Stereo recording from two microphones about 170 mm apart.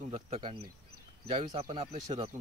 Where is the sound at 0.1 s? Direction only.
30° right (ahead or behind).